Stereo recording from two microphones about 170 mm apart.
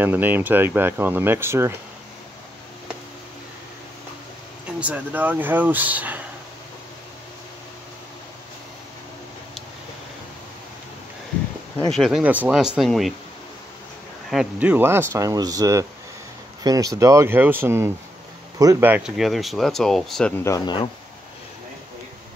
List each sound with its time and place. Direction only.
0.0 s speech: 10° right (ahead or behind)
4.6 s speech: 5° right (ahead or behind)
11.9 s speech: centre (ahead or behind)
14.3 s speech: 5° right (ahead or behind)
20.4 s speech: 25° left (ahead or behind)